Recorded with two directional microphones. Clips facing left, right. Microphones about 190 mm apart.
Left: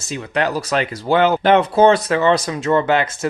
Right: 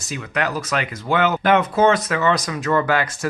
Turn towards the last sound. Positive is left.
turn(degrees=25)  # may be behind; listen again after turning